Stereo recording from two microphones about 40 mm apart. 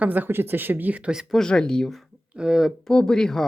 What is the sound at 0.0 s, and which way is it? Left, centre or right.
Speech, right.